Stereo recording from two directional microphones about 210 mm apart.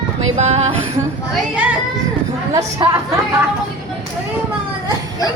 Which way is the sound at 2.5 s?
15° right (ahead or behind).